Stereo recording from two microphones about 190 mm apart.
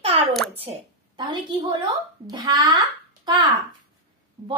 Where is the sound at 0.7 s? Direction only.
30° right (ahead or behind).